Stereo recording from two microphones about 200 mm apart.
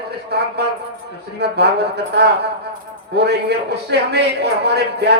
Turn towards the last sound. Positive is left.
turn(degrees=-55)  # may be behind; listen again after turning